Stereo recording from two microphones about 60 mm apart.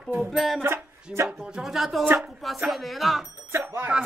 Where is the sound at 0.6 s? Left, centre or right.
Right.